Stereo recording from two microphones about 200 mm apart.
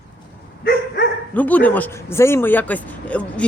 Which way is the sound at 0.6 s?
50° left (ahead or behind).